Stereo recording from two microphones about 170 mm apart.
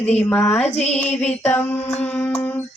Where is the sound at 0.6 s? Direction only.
40° left (ahead or behind).